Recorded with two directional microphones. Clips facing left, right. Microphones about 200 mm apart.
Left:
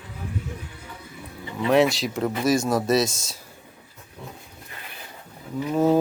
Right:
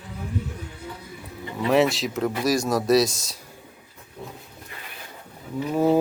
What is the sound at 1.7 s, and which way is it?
Speech, centre (ahead or behind).